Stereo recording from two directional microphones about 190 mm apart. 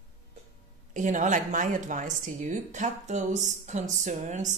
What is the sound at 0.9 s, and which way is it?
Speech, 40° right (ahead or behind).